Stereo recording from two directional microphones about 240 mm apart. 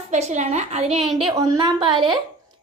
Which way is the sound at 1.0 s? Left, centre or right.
Centre.